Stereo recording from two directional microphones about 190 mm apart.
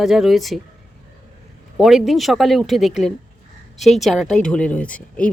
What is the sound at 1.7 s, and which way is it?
Speech, centre (ahead or behind).